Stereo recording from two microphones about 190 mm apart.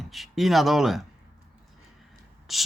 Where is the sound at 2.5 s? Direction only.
Centre (ahead or behind).